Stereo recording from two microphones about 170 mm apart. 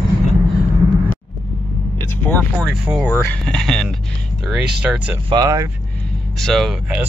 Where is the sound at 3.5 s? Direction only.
Centre (ahead or behind).